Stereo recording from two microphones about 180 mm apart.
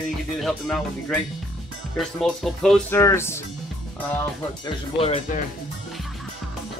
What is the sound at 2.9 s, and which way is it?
Speech, 15° left (ahead or behind).